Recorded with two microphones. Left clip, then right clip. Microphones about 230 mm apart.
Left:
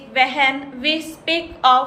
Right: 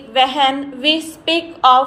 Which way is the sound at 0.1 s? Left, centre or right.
Right.